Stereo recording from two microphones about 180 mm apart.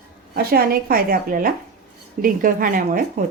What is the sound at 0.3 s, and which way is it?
Speech, 55° right (ahead or behind).